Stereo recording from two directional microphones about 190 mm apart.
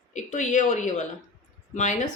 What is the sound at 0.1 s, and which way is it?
Speech, 40° left (ahead or behind).